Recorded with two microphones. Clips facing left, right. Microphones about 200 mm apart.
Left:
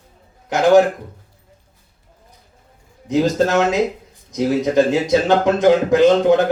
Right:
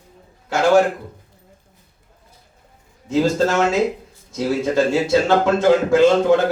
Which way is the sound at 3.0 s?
20° left (ahead or behind).